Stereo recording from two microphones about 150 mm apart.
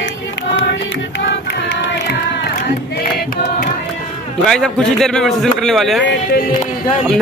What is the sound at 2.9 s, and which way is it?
Choir, 80° left.